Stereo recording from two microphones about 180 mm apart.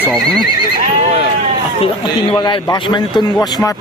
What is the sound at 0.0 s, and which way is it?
Speech, centre (ahead or behind).